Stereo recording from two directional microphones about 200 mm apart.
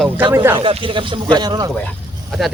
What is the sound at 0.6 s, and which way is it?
Speech, 30° right (ahead or behind).